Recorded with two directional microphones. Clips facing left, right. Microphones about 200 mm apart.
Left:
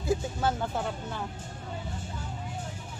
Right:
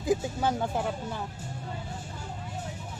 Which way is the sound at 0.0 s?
15° right (ahead or behind).